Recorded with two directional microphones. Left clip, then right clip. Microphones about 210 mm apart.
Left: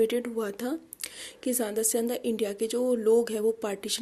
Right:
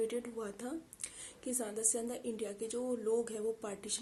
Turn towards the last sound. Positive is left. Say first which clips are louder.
# left 11 dB
turn(degrees=40)  # may be behind; listen again after turning